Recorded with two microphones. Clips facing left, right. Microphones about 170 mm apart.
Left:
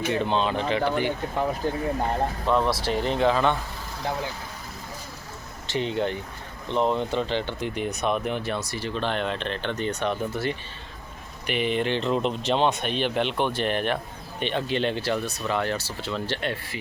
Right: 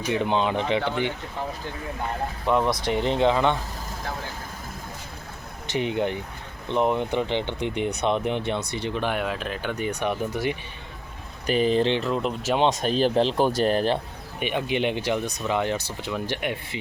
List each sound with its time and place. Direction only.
0.1 s speech: 15° right (ahead or behind)
1.6 s speech: 40° left (ahead or behind)
2.5 s speech: 15° right (ahead or behind)
5.6 s speech: 15° right (ahead or behind)
11.4 s speech: 35° right (ahead or behind)
12.0 s speech: centre (ahead or behind)
12.8 s speech: 35° right (ahead or behind)
14.3 s speech: 10° right (ahead or behind)